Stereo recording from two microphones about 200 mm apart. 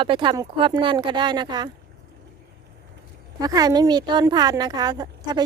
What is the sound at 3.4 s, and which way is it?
Speech, 20° right (ahead or behind).